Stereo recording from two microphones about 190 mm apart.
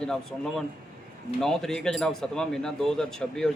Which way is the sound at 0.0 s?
5° left (ahead or behind).